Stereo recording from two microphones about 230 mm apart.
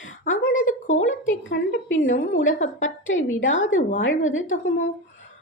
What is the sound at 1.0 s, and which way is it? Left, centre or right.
A woman's voice, left.